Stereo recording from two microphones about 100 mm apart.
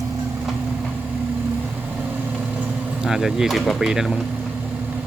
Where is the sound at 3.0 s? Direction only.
5° right (ahead or behind).